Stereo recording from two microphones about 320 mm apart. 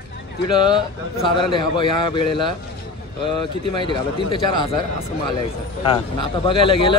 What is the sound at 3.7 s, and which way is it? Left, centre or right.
Speech, centre.